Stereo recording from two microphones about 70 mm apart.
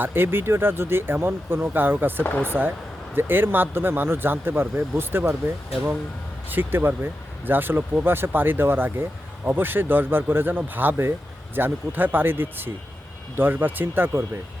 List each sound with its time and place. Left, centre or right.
0.0 s speech: right
6.5 s speech: right